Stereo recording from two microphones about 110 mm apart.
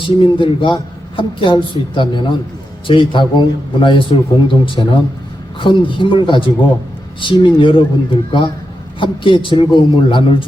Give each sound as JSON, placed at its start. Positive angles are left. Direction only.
{"t": 0.0, "sound": "speech", "side_deg": 55}